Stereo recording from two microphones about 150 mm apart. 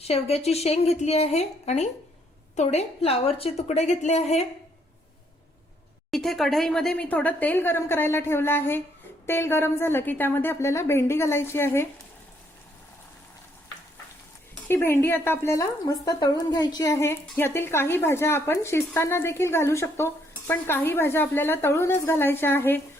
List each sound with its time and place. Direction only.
0.0 s a woman's voice: 45° left (ahead or behind)
6.1 s speech: centre (ahead or behind)
14.5 s speech: 15° left (ahead or behind)